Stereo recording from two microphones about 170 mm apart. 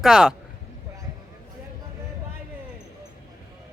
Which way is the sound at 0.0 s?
5° right (ahead or behind).